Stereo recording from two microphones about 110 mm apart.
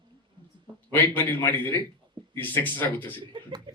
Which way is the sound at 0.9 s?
20° left (ahead or behind).